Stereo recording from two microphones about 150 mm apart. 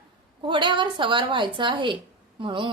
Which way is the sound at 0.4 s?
30° right (ahead or behind).